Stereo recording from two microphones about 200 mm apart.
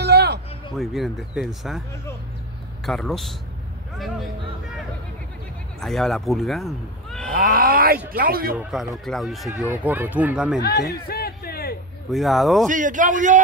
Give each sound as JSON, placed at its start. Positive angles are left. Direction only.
{"t": 0.0, "sound": "a sound", "side_deg": -55}
{"t": 0.7, "sound": "speech", "side_deg": 0}
{"t": 2.8, "sound": "speech", "side_deg": 0}
{"t": 7.3, "sound": "speech", "side_deg": -45}
{"t": 8.5, "sound": "speech", "side_deg": 0}
{"t": 9.5, "sound": "speech", "side_deg": -10}
{"t": 10.7, "sound": "music", "side_deg": 55}
{"t": 12.1, "sound": "speech", "side_deg": 0}
{"t": 12.6, "sound": "speech", "side_deg": -40}